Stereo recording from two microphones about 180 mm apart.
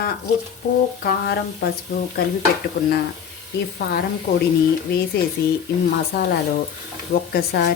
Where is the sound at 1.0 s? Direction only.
60° left (ahead or behind).